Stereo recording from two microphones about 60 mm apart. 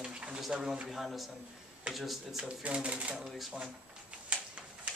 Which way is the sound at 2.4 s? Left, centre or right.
Right.